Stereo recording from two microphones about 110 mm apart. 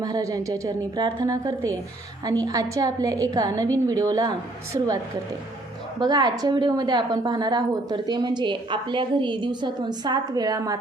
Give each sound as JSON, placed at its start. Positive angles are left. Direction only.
{"t": 0.0, "sound": "a woman's voice", "side_deg": -35}
{"t": 6.0, "sound": "a woman's voice", "side_deg": -40}